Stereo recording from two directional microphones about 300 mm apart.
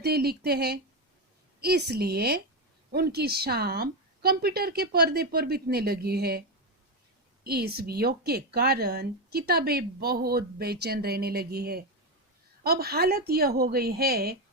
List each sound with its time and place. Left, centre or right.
0.0 s speech: right
7.4 s speech: right